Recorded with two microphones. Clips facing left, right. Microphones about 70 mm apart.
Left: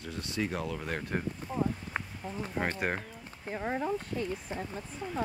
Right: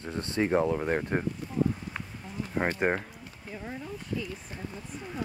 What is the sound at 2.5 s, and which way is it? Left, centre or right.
Speech, right.